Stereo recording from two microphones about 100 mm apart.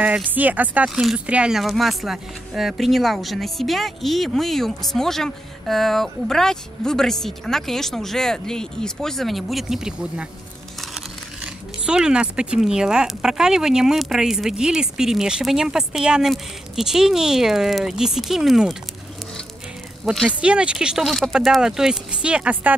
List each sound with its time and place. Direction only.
0.0 s speech: 15° right (ahead or behind)
20.1 s speech: 10° right (ahead or behind)